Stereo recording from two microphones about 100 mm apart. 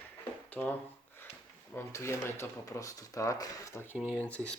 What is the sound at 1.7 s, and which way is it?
Speech, 25° left (ahead or behind).